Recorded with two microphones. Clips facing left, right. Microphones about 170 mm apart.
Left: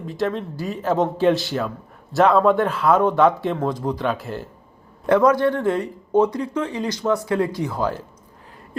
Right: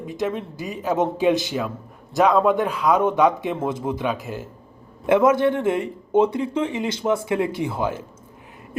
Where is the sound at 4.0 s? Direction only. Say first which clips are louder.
Left 1 dB; centre (ahead or behind).